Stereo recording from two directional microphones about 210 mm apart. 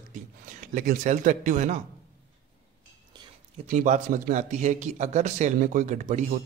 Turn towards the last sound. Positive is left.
turn(degrees=-35)  # may be behind; listen again after turning